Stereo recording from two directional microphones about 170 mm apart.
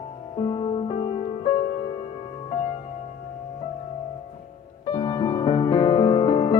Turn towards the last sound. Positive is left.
turn(degrees=30)  # may be behind; listen again after turning